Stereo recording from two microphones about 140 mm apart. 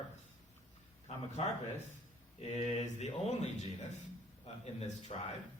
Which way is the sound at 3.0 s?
50° left (ahead or behind).